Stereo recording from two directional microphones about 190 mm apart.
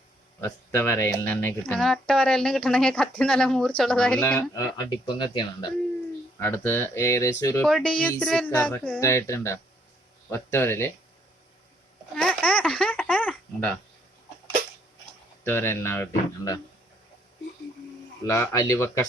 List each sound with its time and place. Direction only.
0.4 s speech: 10° left (ahead or behind)
4.2 s speech: 15° left (ahead or behind)
6.4 s speech: 10° left (ahead or behind)
12.1 s a sound: 5° left (ahead or behind)
15.4 s speech: 10° left (ahead or behind)
18.2 s speech: 15° left (ahead or behind)